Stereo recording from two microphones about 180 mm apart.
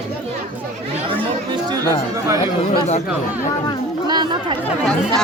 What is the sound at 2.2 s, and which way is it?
Speech, 15° right (ahead or behind).